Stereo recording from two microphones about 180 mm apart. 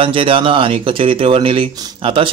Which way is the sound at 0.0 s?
30° right (ahead or behind).